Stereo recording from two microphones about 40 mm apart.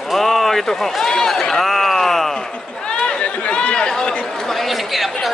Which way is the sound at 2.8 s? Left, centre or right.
Left.